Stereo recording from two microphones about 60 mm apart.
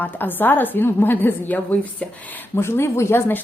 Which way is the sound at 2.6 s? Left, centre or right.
Left.